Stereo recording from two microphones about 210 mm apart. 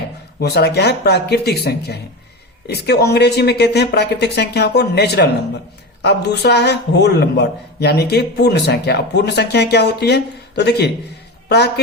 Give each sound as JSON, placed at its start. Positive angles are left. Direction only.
{"t": 0.3, "sound": "a man's voice", "side_deg": 50}